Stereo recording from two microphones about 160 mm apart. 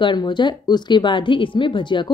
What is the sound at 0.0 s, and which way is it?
Speech, 30° left (ahead or behind).